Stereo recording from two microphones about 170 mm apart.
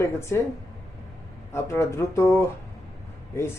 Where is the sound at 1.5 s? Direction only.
15° left (ahead or behind).